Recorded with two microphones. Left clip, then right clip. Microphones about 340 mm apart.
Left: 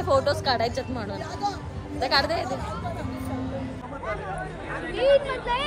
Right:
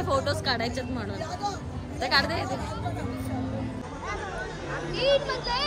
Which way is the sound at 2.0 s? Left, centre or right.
Centre.